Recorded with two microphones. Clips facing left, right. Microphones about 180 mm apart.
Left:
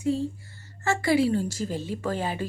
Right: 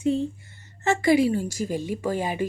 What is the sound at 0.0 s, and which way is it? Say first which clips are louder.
Speech: right 2 dB; 20° right (ahead or behind).